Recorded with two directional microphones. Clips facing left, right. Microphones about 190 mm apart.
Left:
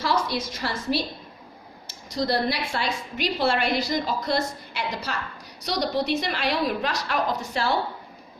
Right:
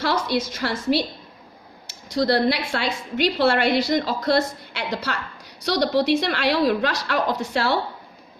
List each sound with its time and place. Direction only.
0.0 s a woman's voice: 70° right (ahead or behind)